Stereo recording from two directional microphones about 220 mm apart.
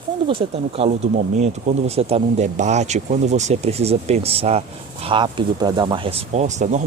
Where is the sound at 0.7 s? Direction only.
30° right (ahead or behind).